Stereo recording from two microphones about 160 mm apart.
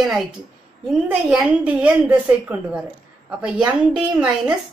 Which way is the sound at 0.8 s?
5° right (ahead or behind).